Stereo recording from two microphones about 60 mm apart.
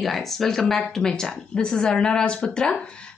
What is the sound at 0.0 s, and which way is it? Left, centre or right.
Speech, centre.